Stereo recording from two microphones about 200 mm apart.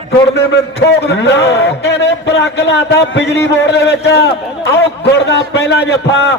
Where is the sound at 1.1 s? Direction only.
55° left (ahead or behind).